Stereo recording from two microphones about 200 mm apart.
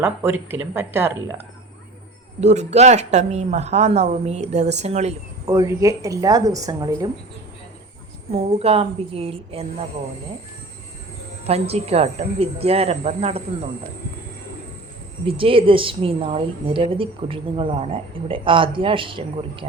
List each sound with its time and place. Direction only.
0.0 s a woman's voice: 10° right (ahead or behind)
2.4 s speech: 35° right (ahead or behind)
5.5 s a woman's voice: 15° right (ahead or behind)
8.5 s a woman's voice: 30° right (ahead or behind)
11.4 s speech: 30° right (ahead or behind)
15.3 s a woman's voice: 25° right (ahead or behind)